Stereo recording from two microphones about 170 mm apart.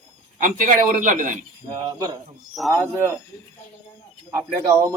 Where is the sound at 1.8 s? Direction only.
25° right (ahead or behind).